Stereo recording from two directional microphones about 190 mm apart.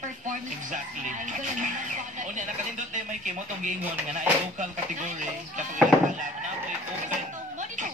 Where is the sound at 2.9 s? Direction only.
40° right (ahead or behind).